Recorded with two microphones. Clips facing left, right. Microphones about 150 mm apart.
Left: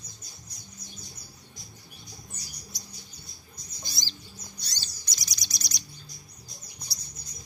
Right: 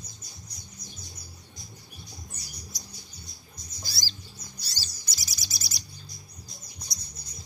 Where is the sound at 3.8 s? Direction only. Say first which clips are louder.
Even; 20° left (ahead or behind).